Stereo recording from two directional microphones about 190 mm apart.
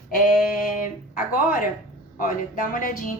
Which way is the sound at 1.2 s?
45° left (ahead or behind).